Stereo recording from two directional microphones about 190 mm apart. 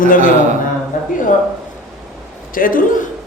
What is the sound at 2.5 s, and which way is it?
Speech, 45° left (ahead or behind).